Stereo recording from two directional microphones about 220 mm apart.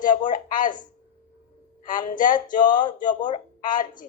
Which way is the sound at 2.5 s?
35° left (ahead or behind).